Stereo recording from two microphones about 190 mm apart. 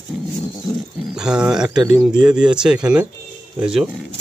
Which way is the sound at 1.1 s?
5° right (ahead or behind).